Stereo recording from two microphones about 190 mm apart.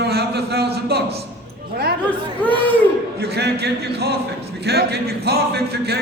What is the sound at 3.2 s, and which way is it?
A man's voice, 60° right (ahead or behind).